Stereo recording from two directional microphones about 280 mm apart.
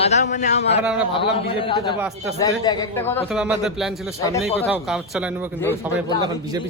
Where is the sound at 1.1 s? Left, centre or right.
Centre.